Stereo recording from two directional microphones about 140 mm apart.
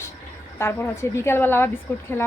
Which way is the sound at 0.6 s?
20° left (ahead or behind).